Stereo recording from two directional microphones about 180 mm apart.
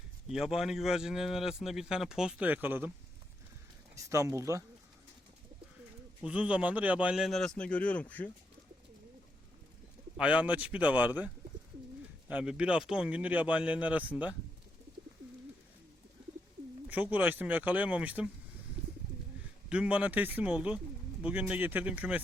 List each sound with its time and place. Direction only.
0.3 s speech: 5° right (ahead or behind)
3.9 s speech: 15° right (ahead or behind)
6.2 s speech: 5° right (ahead or behind)
10.2 s speech: 5° right (ahead or behind)
12.3 s speech: 5° right (ahead or behind)
16.9 s speech: 10° right (ahead or behind)
19.7 s speech: 5° right (ahead or behind)